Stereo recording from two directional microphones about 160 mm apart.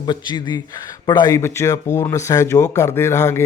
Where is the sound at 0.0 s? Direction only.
30° left (ahead or behind).